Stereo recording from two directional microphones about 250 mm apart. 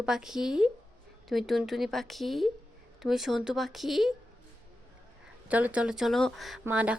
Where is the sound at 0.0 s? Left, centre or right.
Centre.